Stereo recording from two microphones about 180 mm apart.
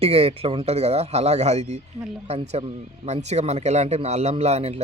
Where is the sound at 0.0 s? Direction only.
35° right (ahead or behind).